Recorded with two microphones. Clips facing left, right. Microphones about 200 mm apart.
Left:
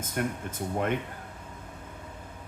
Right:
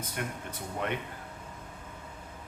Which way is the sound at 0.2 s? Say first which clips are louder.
Left 7 dB; 45° left (ahead or behind).